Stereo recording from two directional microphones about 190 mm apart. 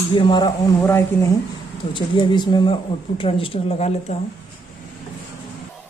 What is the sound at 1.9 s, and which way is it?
Speech, 25° left (ahead or behind).